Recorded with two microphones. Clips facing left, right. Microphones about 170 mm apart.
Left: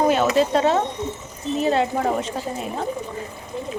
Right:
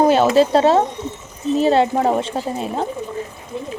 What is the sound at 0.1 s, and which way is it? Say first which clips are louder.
Speech: right 5 dB; 30° right (ahead or behind).